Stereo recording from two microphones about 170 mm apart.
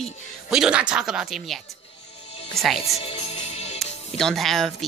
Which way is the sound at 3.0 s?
35° left (ahead or behind).